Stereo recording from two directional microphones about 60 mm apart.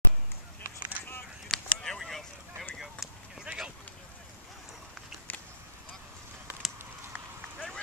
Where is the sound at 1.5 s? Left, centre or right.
Centre.